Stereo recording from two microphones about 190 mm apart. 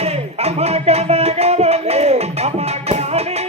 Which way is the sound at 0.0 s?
35° right (ahead or behind).